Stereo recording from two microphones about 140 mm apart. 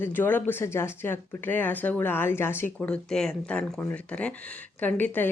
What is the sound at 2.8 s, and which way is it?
Speech, 5° left (ahead or behind).